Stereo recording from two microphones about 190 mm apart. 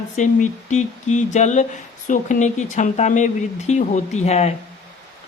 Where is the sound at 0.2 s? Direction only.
40° left (ahead or behind).